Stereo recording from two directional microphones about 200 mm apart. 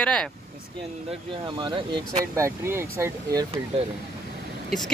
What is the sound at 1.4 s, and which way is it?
Speech, 25° right (ahead or behind).